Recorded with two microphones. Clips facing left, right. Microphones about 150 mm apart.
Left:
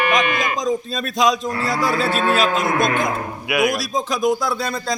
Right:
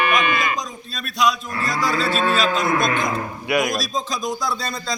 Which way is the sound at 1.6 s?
65° left (ahead or behind).